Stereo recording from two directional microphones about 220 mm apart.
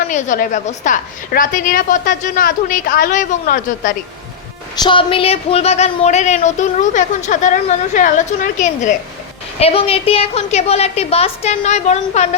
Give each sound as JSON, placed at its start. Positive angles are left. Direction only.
{"t": 0.1, "sound": "a woman's voice", "side_deg": 35}
{"t": 4.8, "sound": "a woman's voice", "side_deg": 20}